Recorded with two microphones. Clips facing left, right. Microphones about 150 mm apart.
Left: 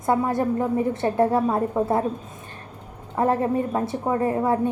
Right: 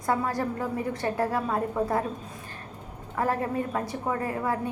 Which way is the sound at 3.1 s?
25° left (ahead or behind).